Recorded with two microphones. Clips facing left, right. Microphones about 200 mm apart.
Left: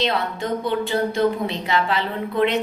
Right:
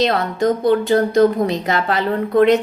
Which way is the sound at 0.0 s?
45° right (ahead or behind).